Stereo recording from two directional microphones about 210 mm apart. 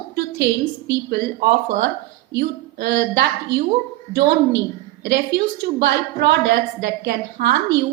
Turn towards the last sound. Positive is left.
turn(degrees=-55)  # may be behind; listen again after turning